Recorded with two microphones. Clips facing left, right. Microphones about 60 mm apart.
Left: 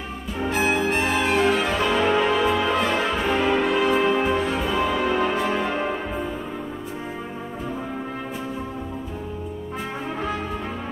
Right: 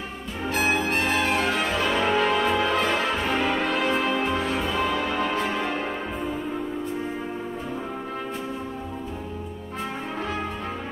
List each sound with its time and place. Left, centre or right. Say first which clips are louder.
0.9 s music: left 2 dB; centre
4.6 s music: left 2 dB; centre